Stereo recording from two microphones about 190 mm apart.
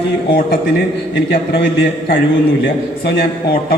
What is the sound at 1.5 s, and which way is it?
A man's voice, 65° left (ahead or behind).